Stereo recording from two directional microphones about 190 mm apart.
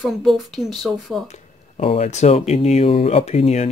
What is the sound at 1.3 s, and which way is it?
Speech, 35° left (ahead or behind).